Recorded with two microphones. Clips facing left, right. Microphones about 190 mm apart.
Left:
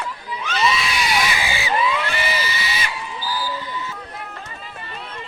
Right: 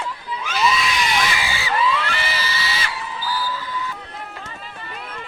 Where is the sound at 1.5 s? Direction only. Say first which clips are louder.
Even; 15° left (ahead or behind).